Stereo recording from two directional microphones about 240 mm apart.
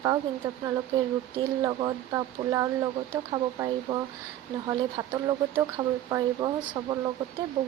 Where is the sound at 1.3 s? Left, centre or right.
Centre.